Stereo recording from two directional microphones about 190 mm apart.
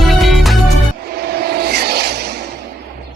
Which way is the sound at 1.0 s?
55° right (ahead or behind).